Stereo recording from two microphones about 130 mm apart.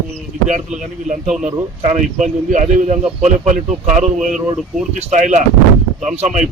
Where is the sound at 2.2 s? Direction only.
75° right (ahead or behind).